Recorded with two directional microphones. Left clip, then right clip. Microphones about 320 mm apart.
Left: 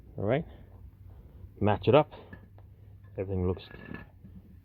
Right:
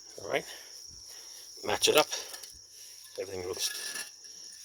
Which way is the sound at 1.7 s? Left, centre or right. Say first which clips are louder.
Left 1 dB; centre.